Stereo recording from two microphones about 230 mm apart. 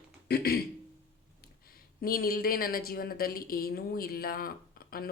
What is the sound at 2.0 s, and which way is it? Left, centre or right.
Speech, left.